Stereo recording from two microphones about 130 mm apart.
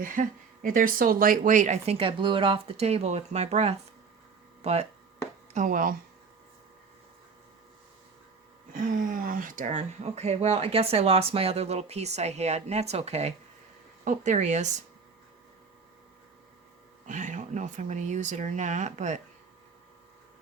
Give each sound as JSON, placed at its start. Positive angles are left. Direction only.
{"t": 0.0, "sound": "speech", "side_deg": -90}
{"t": 5.5, "sound": "speech", "side_deg": -90}
{"t": 8.7, "sound": "speech", "side_deg": -90}
{"t": 14.0, "sound": "speech", "side_deg": -70}
{"t": 17.1, "sound": "speech", "side_deg": -70}